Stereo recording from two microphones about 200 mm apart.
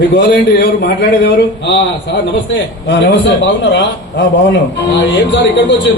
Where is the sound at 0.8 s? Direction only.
55° left (ahead or behind).